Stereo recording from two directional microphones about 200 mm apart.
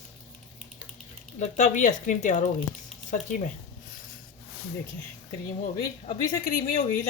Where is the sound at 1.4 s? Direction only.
40° left (ahead or behind).